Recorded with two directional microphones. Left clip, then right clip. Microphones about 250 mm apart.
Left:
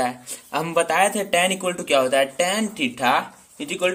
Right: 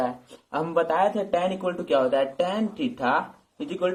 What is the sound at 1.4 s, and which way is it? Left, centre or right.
Speech, left.